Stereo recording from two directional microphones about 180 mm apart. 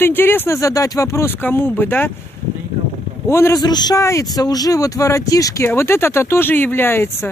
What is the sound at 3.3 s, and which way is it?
A man's voice, 15° left (ahead or behind).